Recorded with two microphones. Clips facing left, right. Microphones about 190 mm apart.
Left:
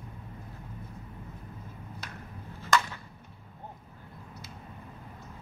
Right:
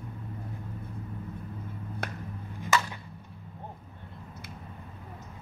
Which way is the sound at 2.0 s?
55° right (ahead or behind).